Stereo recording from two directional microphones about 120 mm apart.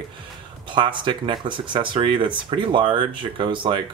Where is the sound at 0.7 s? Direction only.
45° right (ahead or behind).